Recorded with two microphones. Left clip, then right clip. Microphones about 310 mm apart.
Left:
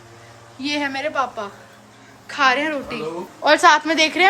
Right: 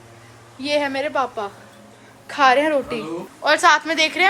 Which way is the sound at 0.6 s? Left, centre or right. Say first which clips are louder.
Right 2 dB; centre.